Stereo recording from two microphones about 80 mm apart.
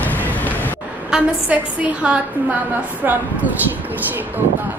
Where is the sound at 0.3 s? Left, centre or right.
Left.